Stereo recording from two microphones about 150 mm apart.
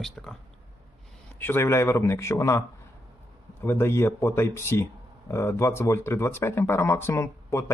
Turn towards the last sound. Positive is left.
turn(degrees=20)  # may be behind; listen again after turning